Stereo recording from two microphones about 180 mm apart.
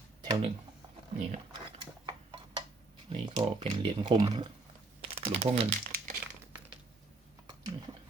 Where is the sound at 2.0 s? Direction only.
25° right (ahead or behind).